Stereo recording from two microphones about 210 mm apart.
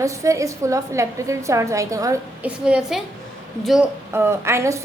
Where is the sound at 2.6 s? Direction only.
5° right (ahead or behind).